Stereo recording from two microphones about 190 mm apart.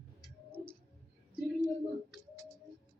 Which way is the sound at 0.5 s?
30° right (ahead or behind).